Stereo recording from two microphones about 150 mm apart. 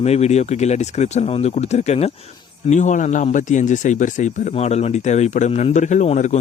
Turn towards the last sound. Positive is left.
turn(degrees=50)  # may be behind; listen again after turning